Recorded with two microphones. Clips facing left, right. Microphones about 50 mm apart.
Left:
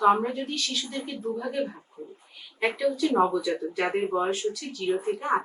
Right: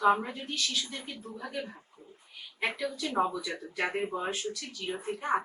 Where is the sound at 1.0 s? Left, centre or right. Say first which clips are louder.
Left 10 dB; centre.